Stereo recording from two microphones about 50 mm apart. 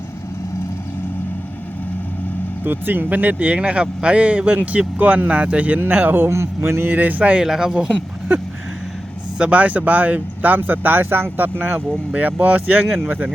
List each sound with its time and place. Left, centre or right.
2.6 s speech: right
6.3 s a man's voice: right
6.9 s speech: right
7.4 s speech: centre
9.4 s speech: right